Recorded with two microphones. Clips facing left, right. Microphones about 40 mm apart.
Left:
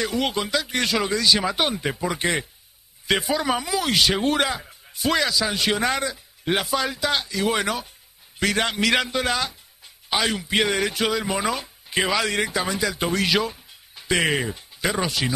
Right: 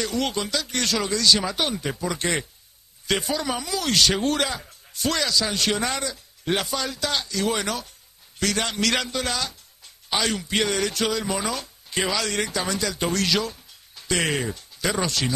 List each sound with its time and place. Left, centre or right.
0.0 s speech: centre